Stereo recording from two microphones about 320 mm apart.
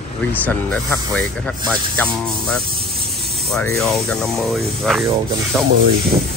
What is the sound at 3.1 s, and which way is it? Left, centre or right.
Speech, centre.